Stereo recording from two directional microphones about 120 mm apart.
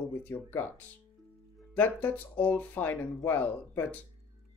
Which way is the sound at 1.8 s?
15° left (ahead or behind).